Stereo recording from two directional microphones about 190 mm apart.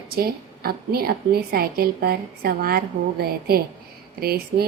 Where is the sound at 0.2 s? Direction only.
55° right (ahead or behind).